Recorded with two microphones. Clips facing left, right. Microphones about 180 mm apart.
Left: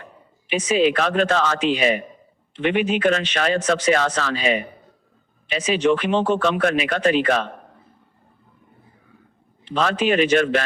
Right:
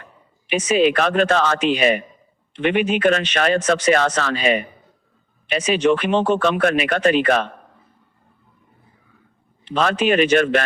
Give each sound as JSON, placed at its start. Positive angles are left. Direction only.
{"t": 0.5, "sound": "speech", "side_deg": -65}
{"t": 9.6, "sound": "speech", "side_deg": -65}